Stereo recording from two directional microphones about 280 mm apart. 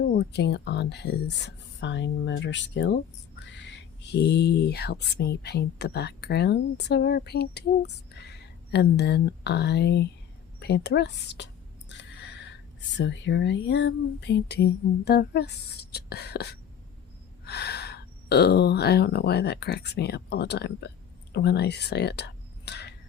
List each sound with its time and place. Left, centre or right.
0.2 s speech: left
11.9 s a sound: left
13.0 s speech: left